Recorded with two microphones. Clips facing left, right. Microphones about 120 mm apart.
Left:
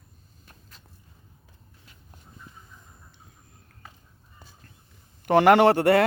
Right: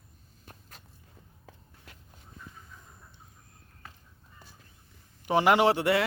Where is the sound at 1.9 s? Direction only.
75° right (ahead or behind).